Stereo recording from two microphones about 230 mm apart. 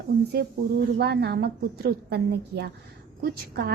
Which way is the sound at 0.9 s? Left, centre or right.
Right.